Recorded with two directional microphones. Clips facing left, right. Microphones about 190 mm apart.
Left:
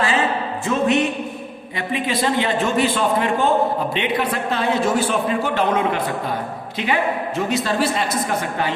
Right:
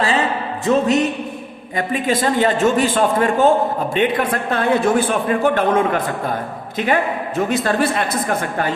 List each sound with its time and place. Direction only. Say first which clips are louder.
0.7 s a man's voice: right 3 dB; 40° right (ahead or behind)